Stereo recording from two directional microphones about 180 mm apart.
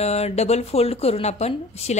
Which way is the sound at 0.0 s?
35° left (ahead or behind).